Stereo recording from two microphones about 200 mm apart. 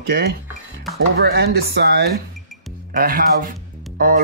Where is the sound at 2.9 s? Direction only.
45° right (ahead or behind).